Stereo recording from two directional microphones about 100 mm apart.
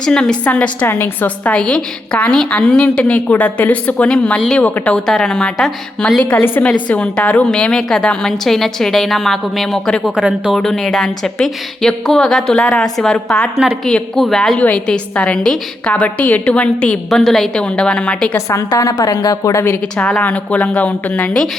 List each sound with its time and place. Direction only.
0.0 s a woman's voice: 10° left (ahead or behind)
6.3 s a woman's voice: 15° left (ahead or behind)
18.3 s a woman's voice: 30° left (ahead or behind)
20.0 s a woman's voice: 10° left (ahead or behind)